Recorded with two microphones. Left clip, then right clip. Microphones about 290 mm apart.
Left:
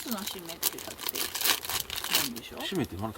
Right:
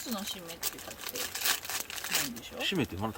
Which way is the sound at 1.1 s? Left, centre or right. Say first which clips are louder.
Left 3 dB; left.